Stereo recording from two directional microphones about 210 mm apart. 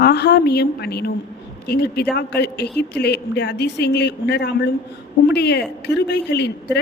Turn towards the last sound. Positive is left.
turn(degrees=55)  # may be behind; listen again after turning